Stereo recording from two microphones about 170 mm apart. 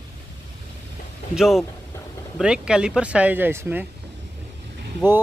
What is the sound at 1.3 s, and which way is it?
Speech, centre (ahead or behind).